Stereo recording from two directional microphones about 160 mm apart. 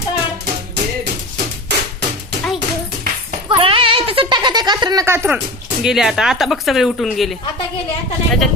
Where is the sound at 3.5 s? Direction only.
35° right (ahead or behind); by 5.4 s 15° right (ahead or behind).